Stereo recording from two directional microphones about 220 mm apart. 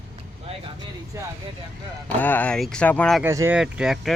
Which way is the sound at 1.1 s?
10° right (ahead or behind).